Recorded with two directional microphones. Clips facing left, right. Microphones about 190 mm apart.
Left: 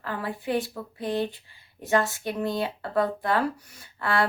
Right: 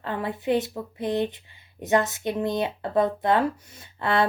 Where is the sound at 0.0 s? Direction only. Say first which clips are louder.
Right 3 dB; 20° right (ahead or behind).